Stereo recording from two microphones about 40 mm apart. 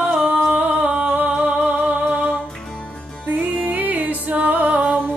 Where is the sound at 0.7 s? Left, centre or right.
Right.